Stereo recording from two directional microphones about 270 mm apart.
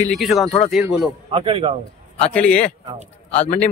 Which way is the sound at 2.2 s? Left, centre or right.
Centre.